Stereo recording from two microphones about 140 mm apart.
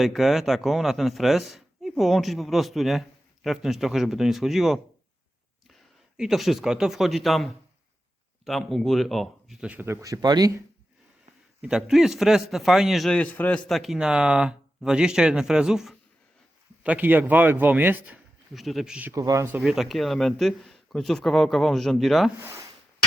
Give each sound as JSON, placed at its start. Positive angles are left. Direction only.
{"t": 0.0, "sound": "a man's voice", "side_deg": 0}
{"t": 6.1, "sound": "a man's voice", "side_deg": -5}
{"t": 11.6, "sound": "a man's voice", "side_deg": -5}
{"t": 13.7, "sound": "a man's voice", "side_deg": 0}
{"t": 18.5, "sound": "a man's voice", "side_deg": 0}
{"t": 19.1, "sound": "speech", "side_deg": -25}
{"t": 19.6, "sound": "a man's voice", "side_deg": 0}